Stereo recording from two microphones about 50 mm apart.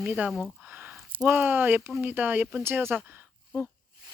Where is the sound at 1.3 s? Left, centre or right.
Right.